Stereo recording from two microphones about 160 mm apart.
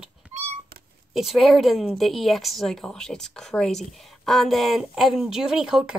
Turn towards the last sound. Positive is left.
turn(degrees=-5)  # may be behind; listen again after turning